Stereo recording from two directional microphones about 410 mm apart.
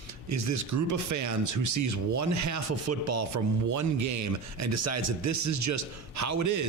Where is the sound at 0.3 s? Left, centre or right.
Right.